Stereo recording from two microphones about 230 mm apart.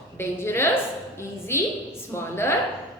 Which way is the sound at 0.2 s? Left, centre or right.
Centre.